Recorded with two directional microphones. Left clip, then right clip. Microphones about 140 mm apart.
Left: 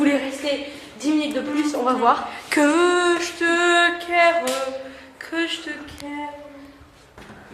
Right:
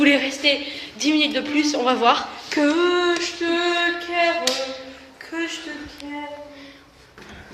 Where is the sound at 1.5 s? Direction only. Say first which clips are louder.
Right 2 dB; centre (ahead or behind).